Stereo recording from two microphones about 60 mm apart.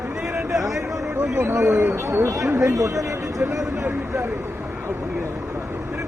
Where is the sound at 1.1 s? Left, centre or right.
Right.